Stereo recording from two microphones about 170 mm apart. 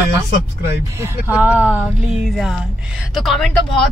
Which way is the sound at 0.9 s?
10° right (ahead or behind).